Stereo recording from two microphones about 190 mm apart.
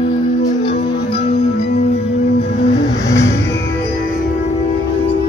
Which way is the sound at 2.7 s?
70° left (ahead or behind).